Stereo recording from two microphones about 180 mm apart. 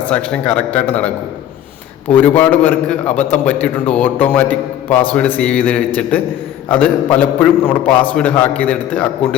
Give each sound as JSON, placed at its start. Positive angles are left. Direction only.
{"t": 0.1, "sound": "a man's voice", "side_deg": 10}